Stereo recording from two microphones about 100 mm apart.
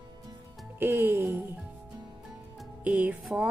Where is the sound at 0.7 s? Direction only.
20° right (ahead or behind).